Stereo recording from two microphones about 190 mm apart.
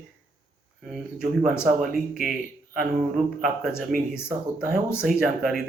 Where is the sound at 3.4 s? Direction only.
5° right (ahead or behind).